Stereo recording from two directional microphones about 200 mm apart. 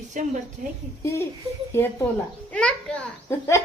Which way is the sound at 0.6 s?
40° right (ahead or behind).